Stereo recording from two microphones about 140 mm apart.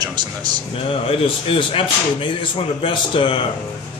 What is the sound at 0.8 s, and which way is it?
Speech, 40° left (ahead or behind).